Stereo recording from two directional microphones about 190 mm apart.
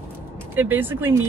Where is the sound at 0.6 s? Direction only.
10° right (ahead or behind).